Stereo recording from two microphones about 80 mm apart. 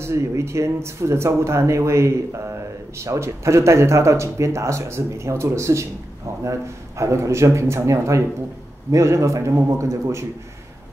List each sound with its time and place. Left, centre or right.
0.0 s speech: right